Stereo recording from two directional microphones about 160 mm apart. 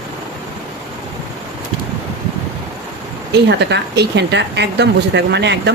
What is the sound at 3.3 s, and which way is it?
Speech, 90° right.